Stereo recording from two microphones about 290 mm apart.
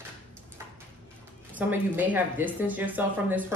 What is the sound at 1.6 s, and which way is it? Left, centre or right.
Speech, centre.